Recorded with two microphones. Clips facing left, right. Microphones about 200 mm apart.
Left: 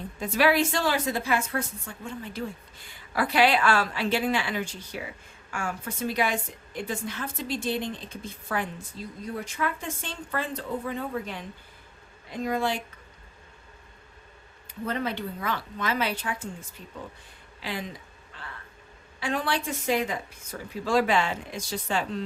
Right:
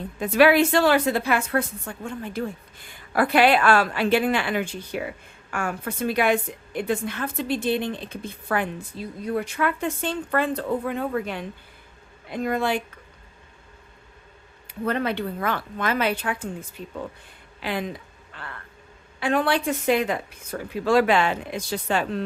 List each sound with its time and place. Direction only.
0.2 s a woman's voice: 60° right (ahead or behind)
14.7 s a woman's voice: 65° right (ahead or behind)
19.2 s a woman's voice: 60° right (ahead or behind)